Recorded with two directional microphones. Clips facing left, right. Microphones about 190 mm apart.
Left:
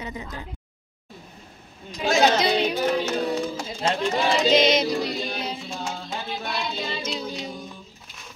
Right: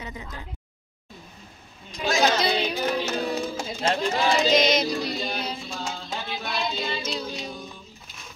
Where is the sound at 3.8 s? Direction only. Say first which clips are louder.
Left 1 dB; 25° left (ahead or behind).